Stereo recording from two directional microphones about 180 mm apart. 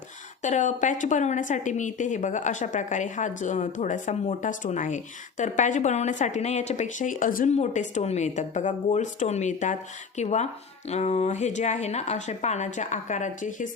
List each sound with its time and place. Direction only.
0.4 s a woman's voice: 45° left (ahead or behind)